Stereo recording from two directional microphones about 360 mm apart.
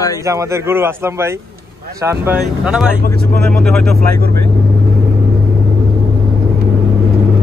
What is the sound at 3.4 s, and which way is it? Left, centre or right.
Speech, centre.